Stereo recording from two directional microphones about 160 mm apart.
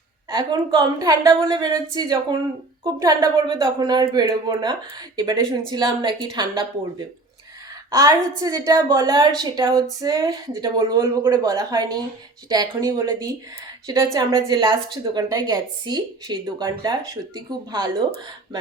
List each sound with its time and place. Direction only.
0.3 s a woman's voice: 25° right (ahead or behind)
7.9 s a woman's voice: 25° right (ahead or behind)